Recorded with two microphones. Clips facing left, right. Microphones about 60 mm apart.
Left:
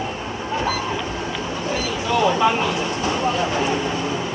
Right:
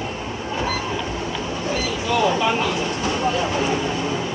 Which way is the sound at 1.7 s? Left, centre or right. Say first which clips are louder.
Even; left.